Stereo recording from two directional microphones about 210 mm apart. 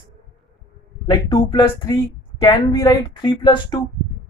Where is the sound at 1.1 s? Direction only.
20° left (ahead or behind).